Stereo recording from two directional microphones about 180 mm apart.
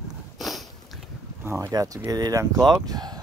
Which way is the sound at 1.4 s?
15° right (ahead or behind).